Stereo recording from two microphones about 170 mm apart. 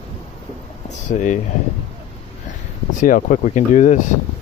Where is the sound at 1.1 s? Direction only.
45° left (ahead or behind).